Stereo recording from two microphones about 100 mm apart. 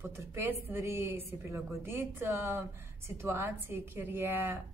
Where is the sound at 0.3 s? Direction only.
20° right (ahead or behind).